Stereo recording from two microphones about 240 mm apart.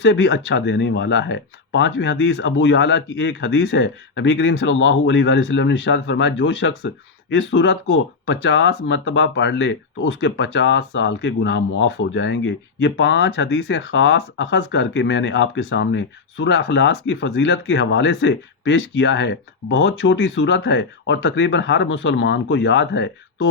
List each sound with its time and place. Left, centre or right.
0.0 s speech: left